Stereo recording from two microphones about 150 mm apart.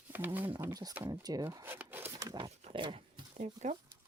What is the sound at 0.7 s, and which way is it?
Speech, 25° right (ahead or behind).